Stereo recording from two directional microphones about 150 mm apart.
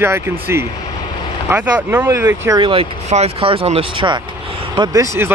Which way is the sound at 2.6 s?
40° right (ahead or behind).